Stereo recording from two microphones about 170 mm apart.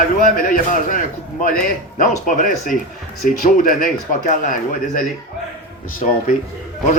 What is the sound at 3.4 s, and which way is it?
A man's voice, 55° left (ahead or behind).